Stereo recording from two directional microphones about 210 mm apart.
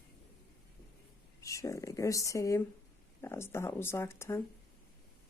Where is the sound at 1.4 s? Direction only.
15° left (ahead or behind).